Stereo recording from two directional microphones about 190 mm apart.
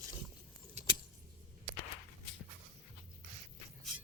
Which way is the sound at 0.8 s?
35° right (ahead or behind).